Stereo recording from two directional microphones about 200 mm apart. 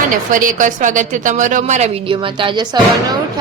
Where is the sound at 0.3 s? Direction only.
40° right (ahead or behind).